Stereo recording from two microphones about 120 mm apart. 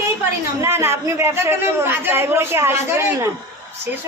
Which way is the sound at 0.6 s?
20° right (ahead or behind).